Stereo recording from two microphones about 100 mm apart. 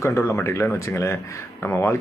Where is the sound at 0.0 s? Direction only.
30° left (ahead or behind).